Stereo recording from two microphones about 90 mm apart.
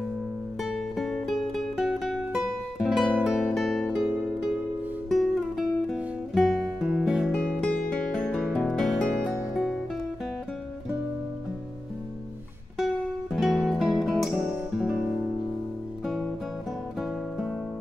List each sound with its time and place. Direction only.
0.6 s music: centre (ahead or behind)
4.0 s music: 10° right (ahead or behind)
5.1 s music: centre (ahead or behind)
12.7 s music: centre (ahead or behind)